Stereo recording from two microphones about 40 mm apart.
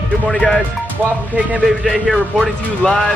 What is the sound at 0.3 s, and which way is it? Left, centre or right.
Speech, left.